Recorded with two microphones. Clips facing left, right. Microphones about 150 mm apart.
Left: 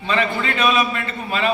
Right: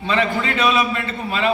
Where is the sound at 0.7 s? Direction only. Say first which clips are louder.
Even; 20° right (ahead or behind).